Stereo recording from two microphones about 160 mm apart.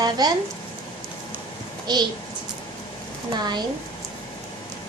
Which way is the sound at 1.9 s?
25° right (ahead or behind).